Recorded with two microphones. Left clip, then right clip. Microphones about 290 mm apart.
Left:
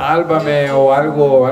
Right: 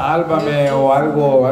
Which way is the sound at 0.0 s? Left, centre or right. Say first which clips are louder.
Left 2 dB; centre.